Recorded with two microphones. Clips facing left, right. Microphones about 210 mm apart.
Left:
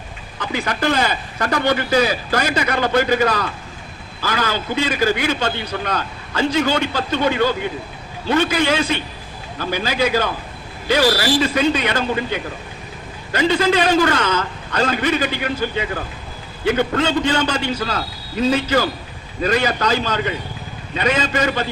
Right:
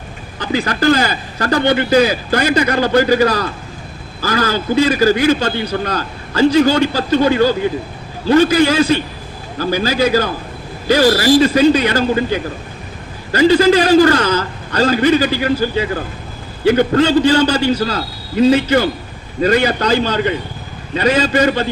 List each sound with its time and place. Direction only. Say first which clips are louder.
0.3 s a man's voice: right 5 dB; 35° right (ahead or behind)